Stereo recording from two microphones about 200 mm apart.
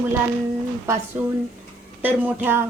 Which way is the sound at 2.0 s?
10° right (ahead or behind).